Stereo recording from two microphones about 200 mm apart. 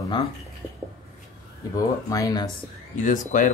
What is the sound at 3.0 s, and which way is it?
Speech, 40° left (ahead or behind).